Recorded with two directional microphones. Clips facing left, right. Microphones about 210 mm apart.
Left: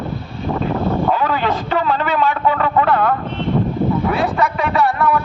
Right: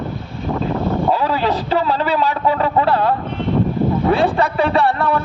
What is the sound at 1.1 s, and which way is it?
A man's voice, 30° right (ahead or behind).